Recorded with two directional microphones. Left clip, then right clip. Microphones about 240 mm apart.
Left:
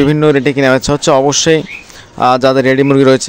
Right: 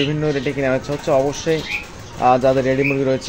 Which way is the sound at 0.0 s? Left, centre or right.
Left.